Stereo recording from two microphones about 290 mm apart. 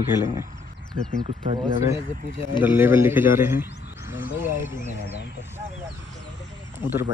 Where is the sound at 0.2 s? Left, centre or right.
Centre.